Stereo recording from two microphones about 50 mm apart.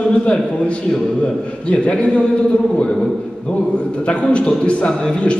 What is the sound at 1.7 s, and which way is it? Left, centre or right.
Speech, left.